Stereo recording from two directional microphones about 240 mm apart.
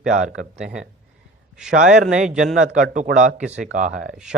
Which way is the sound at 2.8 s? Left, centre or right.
Right.